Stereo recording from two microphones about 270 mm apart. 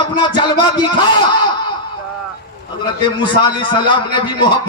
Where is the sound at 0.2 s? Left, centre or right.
Centre.